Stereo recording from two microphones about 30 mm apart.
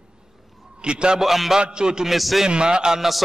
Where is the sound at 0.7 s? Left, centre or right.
Right.